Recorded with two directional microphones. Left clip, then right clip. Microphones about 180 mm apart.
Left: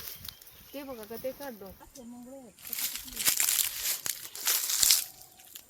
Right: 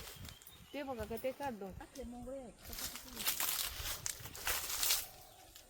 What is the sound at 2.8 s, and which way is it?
Crumpling, 45° left (ahead or behind).